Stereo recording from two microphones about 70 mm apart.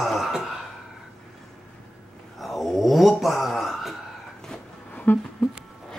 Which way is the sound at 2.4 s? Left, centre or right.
Centre.